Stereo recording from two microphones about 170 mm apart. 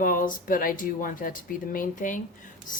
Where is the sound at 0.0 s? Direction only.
55° left (ahead or behind).